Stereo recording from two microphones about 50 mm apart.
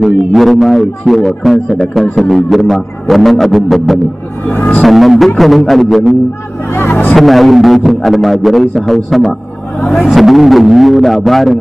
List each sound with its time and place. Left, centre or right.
0.0 s a man's voice: centre
4.5 s speech: left
4.8 s a man's voice: centre
6.7 s speech: left
7.2 s a man's voice: centre